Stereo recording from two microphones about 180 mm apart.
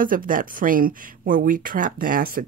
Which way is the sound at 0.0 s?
50° right (ahead or behind).